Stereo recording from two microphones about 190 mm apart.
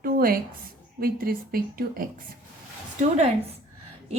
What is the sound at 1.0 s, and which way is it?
A woman's voice, 50° right (ahead or behind).